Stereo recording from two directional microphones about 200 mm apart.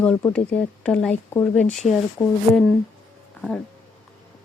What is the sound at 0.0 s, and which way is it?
Speech, 5° left (ahead or behind).